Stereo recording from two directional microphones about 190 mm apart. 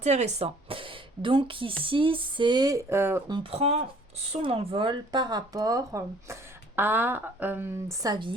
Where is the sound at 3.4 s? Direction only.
30° right (ahead or behind).